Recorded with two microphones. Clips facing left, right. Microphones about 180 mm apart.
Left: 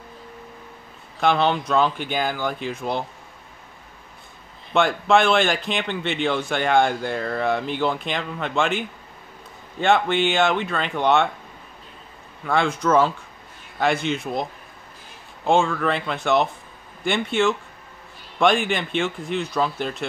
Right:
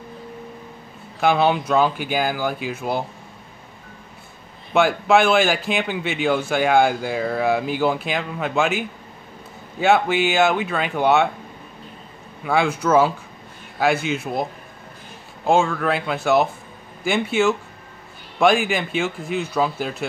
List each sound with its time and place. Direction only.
1.2 s a man's voice: 5° right (ahead or behind)
4.7 s a man's voice: 5° right (ahead or behind)
12.4 s a man's voice: 5° right (ahead or behind)